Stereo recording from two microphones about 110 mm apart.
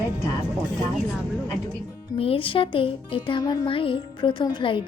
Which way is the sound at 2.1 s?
60° left (ahead or behind).